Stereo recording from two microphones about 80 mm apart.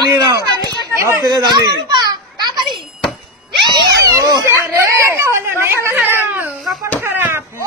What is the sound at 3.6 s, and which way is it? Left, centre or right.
Cat, right.